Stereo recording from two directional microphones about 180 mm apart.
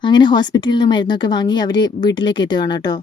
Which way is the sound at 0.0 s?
25° left (ahead or behind).